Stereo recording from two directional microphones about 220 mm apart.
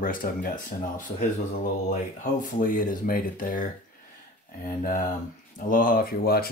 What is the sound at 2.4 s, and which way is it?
Speech, 40° left (ahead or behind).